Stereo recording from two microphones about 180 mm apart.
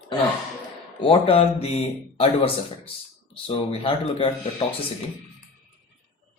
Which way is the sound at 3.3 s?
30° left (ahead or behind).